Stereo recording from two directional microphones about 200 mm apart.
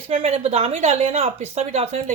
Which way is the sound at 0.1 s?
30° right (ahead or behind).